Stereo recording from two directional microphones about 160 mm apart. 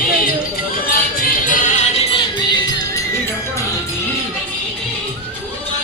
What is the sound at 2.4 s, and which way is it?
Music, 25° left (ahead or behind).